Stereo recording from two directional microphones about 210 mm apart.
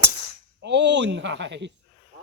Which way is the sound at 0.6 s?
55° right (ahead or behind).